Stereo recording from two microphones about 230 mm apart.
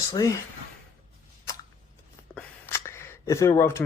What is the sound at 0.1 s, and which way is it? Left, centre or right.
Speech, centre.